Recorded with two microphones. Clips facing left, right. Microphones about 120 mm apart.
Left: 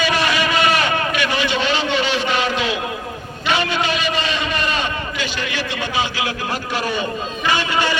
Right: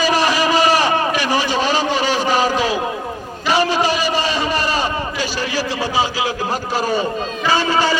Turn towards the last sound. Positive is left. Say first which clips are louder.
# right 3 dB
turn(degrees=-40)  # may be behind; listen again after turning